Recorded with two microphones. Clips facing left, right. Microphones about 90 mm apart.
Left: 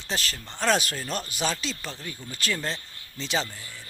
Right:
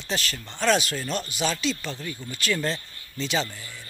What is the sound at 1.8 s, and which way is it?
Speech, centre (ahead or behind).